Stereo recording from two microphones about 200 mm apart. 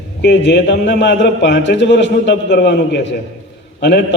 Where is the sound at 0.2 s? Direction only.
60° left (ahead or behind).